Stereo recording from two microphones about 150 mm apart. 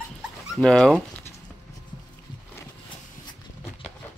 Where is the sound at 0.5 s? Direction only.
5° left (ahead or behind).